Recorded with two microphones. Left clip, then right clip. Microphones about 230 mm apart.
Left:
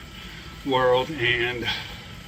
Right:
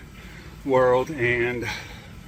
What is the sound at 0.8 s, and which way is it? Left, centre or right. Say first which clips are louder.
Speech: right 1 dB; centre.